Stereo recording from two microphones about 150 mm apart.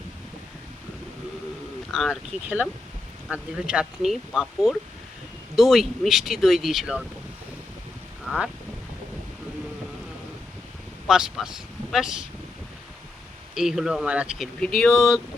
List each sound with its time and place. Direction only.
1.9 s speech: centre (ahead or behind)
3.2 s speech: 5° right (ahead or behind)
8.3 s speech: 5° right (ahead or behind)
11.1 s speech: 5° right (ahead or behind)
13.5 s speech: centre (ahead or behind)